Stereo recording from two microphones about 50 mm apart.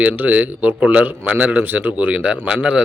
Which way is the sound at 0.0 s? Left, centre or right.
Right.